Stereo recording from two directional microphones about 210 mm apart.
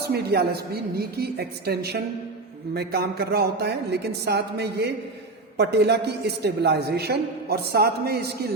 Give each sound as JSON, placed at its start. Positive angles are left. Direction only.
{"t": 0.1, "sound": "a man's voice", "side_deg": -50}